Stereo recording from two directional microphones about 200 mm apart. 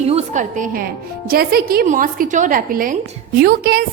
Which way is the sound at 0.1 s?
35° right (ahead or behind).